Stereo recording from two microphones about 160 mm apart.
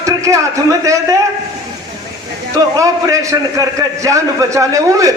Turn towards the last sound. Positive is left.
turn(degrees=-20)  # may be behind; listen again after turning